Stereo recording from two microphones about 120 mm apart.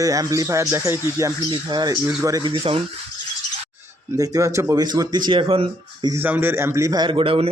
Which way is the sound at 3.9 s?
25° right (ahead or behind).